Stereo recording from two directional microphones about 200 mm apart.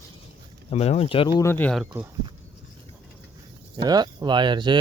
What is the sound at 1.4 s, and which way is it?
Speech, 10° left (ahead or behind).